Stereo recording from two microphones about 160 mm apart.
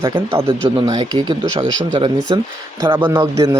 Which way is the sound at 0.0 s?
20° right (ahead or behind).